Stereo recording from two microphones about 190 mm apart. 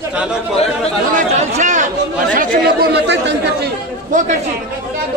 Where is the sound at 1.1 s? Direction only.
40° right (ahead or behind); by 3.7 s 65° right (ahead or behind).